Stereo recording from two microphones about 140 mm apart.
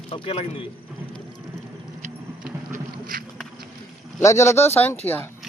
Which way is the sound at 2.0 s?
75° right (ahead or behind).